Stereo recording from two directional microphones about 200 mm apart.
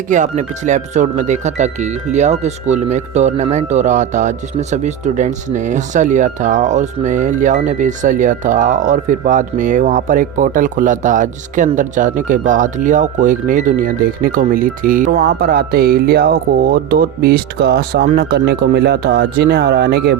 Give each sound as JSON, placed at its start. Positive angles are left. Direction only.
{"t": 0.1, "sound": "speech", "side_deg": -40}